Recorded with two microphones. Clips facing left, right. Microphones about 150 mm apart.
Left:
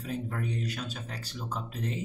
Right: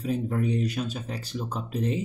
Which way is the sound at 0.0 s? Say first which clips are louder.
Right 7 dB; 15° right (ahead or behind).